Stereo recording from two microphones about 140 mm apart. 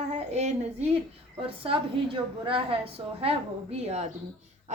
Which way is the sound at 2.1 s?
40° right (ahead or behind).